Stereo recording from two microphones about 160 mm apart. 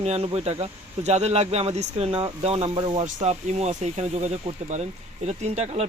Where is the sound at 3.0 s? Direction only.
45° right (ahead or behind).